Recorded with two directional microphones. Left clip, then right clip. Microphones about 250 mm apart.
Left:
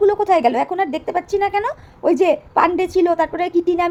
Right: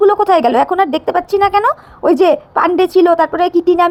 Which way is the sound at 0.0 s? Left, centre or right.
Centre.